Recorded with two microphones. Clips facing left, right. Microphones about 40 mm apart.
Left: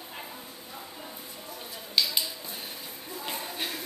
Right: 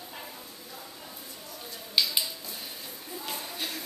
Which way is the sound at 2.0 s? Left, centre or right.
Centre.